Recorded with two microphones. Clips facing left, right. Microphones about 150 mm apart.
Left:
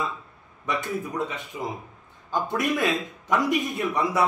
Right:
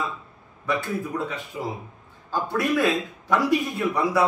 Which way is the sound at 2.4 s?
20° left (ahead or behind).